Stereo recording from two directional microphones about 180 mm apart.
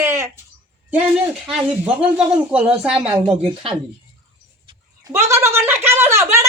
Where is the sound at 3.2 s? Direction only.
30° right (ahead or behind).